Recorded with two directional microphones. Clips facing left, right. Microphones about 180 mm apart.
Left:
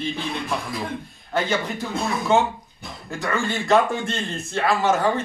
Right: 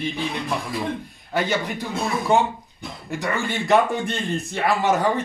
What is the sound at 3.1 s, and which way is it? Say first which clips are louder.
Speech: even; 15° right (ahead or behind).